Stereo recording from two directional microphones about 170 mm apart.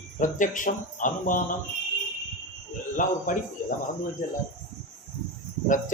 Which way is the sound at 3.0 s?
50° left (ahead or behind).